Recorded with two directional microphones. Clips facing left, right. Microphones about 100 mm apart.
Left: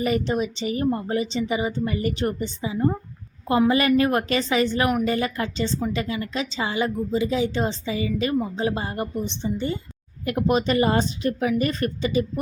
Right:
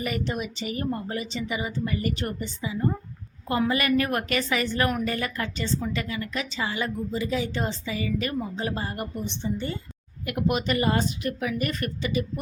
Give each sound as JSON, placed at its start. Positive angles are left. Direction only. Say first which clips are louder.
{"t": 0.0, "sound": "a woman's voice", "louder": "left 6 dB", "side_deg": 30}
{"t": 10.2, "sound": "a woman's voice", "louder": "left 4 dB", "side_deg": 30}